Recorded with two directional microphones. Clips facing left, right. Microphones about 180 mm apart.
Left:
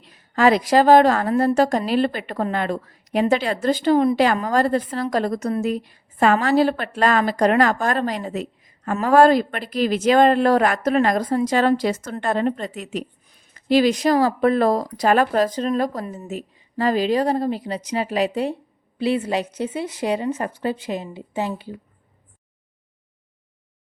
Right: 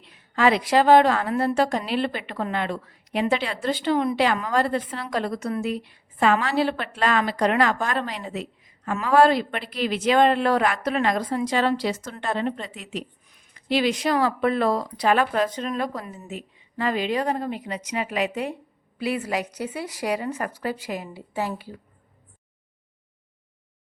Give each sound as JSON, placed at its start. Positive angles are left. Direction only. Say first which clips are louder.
{"t": 0.0, "sound": "a woman's voice", "louder": "left 4 dB", "side_deg": 40}